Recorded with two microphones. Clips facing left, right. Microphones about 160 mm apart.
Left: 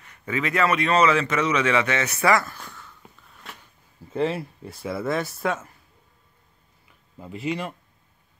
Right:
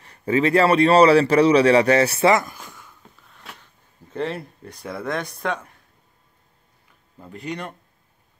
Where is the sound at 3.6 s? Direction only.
5° left (ahead or behind).